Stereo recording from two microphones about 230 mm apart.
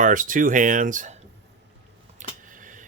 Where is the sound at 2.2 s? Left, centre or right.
Right.